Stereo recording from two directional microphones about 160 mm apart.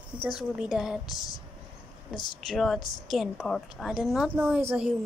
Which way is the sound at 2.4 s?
Centre (ahead or behind).